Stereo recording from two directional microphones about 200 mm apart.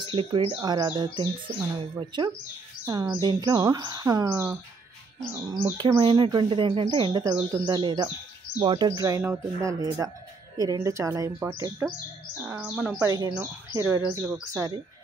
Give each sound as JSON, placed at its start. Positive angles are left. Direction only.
{"t": 0.1, "sound": "speech", "side_deg": -25}
{"t": 5.7, "sound": "speech", "side_deg": -20}